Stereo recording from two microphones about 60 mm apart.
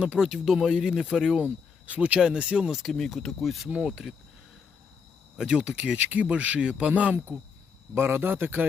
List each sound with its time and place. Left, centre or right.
0.0 s speech: centre
0.3 s speech: centre
1.5 s speech: right; by 4.1 s centre
5.4 s speech: centre
7.9 s speech: right